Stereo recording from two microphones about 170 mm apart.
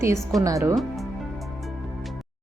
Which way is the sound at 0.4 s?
20° right (ahead or behind).